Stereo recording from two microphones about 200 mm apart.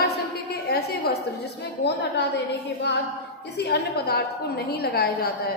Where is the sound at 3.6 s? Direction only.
55° left (ahead or behind).